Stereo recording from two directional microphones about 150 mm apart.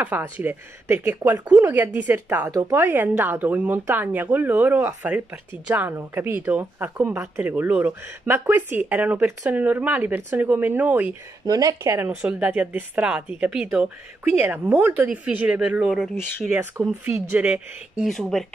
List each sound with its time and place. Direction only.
0.0 s a woman's voice: 10° right (ahead or behind)
11.4 s a woman's voice: 25° right (ahead or behind); by 18.5 s centre (ahead or behind)